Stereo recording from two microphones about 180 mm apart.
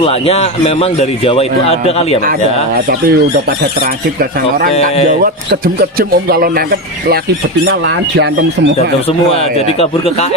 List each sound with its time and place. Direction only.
0.0 s speech: 35° left (ahead or behind)
2.9 s a man's voice: 60° right (ahead or behind)
7.6 s speech: 70° right (ahead or behind)
8.7 s speech: 35° left (ahead or behind)